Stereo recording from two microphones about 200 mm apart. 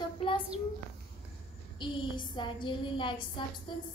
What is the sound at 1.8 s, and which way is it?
A woman's voice, 25° left (ahead or behind).